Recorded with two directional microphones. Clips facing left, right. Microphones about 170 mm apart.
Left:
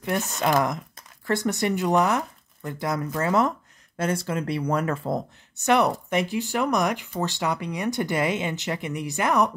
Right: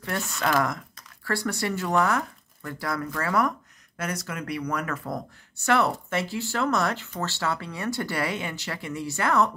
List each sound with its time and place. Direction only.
0.0 s speech: 20° left (ahead or behind)